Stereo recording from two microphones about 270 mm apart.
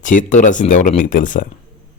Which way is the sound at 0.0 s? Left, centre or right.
Left.